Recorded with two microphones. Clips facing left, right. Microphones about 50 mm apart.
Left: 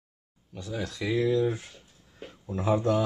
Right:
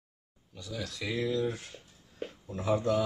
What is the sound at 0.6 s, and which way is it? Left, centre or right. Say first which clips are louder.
Speech: left 5 dB; left.